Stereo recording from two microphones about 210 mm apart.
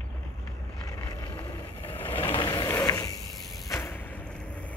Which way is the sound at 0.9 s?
15° left (ahead or behind).